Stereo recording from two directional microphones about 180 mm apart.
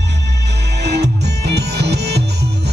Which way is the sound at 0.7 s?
65° right (ahead or behind).